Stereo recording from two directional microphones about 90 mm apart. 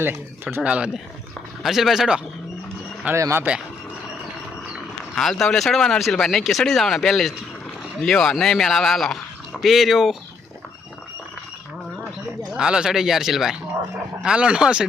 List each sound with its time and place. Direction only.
0.0 s speech: 25° right (ahead or behind)
0.6 s speech: 10° right (ahead or behind)
3.2 s speech: 35° right (ahead or behind)
5.1 s speech: 5° left (ahead or behind)
12.5 s speech: 5° right (ahead or behind)